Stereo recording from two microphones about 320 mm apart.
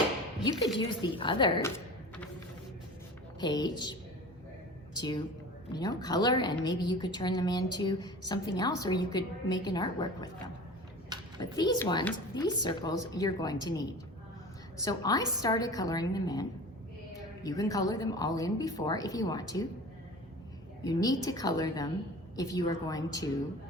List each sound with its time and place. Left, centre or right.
0.8 s a woman's voice: centre
3.4 s a woman's voice: centre
4.9 s a woman's voice: centre
20.8 s a woman's voice: centre